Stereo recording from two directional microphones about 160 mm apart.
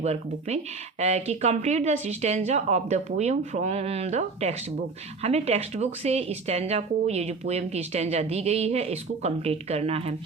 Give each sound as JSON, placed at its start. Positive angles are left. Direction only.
{"t": 0.0, "sound": "speech", "side_deg": -40}